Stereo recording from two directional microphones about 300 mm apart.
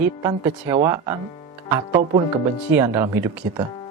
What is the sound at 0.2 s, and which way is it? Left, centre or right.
Speech, centre.